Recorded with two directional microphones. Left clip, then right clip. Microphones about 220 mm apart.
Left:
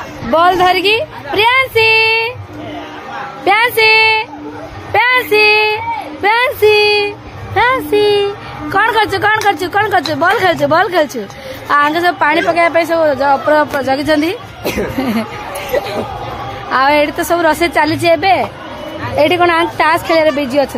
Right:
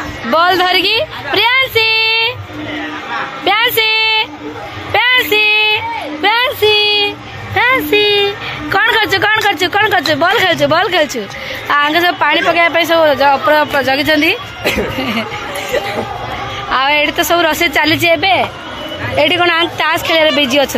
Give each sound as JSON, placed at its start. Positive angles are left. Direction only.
{"t": 0.3, "sound": "a woman's voice", "side_deg": 10}
{"t": 3.4, "sound": "a sound", "side_deg": 10}
{"t": 7.5, "sound": "a man's voice", "side_deg": 10}
{"t": 14.6, "sound": "speech", "side_deg": 35}
{"t": 16.7, "sound": "a man's voice", "side_deg": 20}